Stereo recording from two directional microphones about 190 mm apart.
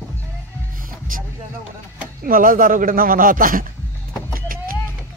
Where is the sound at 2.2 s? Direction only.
50° right (ahead or behind).